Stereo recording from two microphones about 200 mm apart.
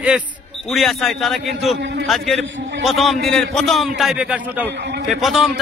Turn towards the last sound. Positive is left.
turn(degrees=0)  # may be behind; listen again after turning